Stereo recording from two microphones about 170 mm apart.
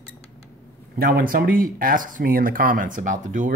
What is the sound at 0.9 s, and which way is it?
Speech, 60° right (ahead or behind).